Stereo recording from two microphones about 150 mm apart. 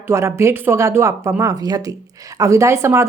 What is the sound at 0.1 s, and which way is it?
Speech, 20° right (ahead or behind).